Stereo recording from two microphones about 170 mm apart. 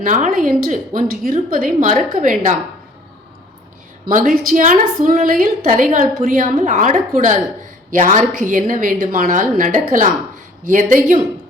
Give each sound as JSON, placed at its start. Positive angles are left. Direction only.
{"t": 0.0, "sound": "a woman's voice", "side_deg": -50}
{"t": 4.0, "sound": "a woman's voice", "side_deg": -50}